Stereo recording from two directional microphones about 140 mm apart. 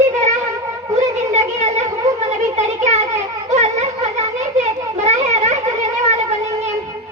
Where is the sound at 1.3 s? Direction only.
55° right (ahead or behind).